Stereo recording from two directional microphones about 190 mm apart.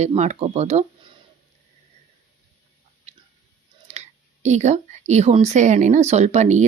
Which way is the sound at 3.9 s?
35° right (ahead or behind).